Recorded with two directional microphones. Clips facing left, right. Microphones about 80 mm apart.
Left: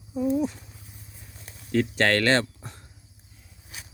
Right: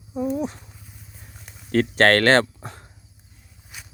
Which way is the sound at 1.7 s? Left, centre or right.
Right.